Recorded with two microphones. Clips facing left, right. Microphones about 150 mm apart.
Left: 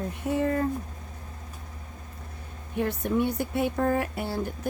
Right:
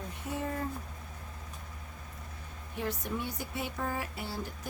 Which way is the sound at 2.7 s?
60° left (ahead or behind).